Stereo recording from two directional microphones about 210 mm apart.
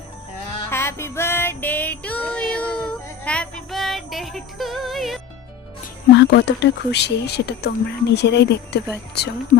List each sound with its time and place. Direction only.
0.7 s music: 10° left (ahead or behind)
6.1 s speech: 55° left (ahead or behind)
9.5 s speech: 40° left (ahead or behind)